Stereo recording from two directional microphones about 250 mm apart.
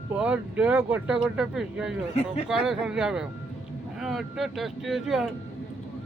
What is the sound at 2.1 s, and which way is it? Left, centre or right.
Speech, left.